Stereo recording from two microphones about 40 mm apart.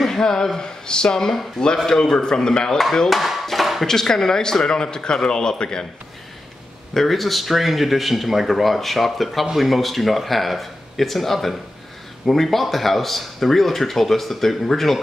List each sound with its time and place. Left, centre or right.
0.0 s speech: centre
3.1 s dishes: centre
3.8 s speech: centre
6.9 s speech: centre